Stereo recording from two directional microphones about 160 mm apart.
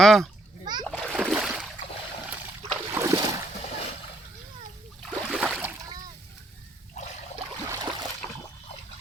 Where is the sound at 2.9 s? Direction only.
15° right (ahead or behind).